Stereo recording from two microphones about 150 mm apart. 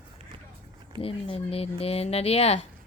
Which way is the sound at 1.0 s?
40° left (ahead or behind).